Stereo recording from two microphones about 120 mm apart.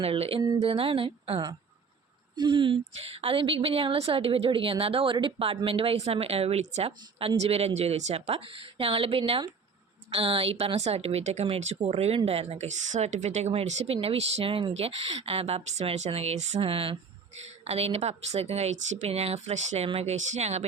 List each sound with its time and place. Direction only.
0.0 s a woman's voice: 55° right (ahead or behind); by 11.4 s 70° right (ahead or behind)
11.4 s speech: 60° right (ahead or behind)
16.6 s a woman's voice: 50° right (ahead or behind); by 20.7 s 65° right (ahead or behind)